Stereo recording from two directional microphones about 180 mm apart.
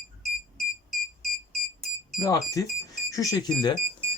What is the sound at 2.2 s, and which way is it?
Speech, 20° left (ahead or behind).